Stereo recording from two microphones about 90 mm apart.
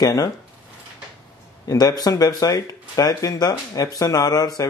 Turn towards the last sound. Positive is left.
turn(degrees=40)  # may be behind; listen again after turning